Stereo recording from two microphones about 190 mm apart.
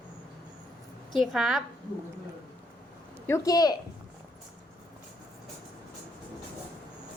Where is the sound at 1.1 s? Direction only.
Centre (ahead or behind).